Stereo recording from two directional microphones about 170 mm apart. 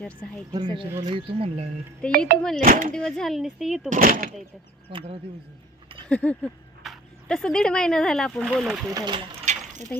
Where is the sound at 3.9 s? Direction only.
55° right (ahead or behind).